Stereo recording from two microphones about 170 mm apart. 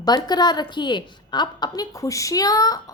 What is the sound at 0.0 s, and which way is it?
A woman's voice, 25° left (ahead or behind).